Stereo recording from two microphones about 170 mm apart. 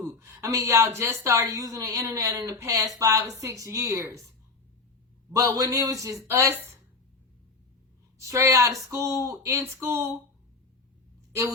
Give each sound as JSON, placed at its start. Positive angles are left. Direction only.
{"t": 0.0, "sound": "a woman's voice", "side_deg": -15}
{"t": 5.3, "sound": "a woman's voice", "side_deg": -20}
{"t": 8.3, "sound": "speech", "side_deg": -20}